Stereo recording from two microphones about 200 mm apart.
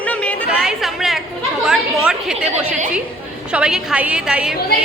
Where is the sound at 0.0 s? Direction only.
5° left (ahead or behind).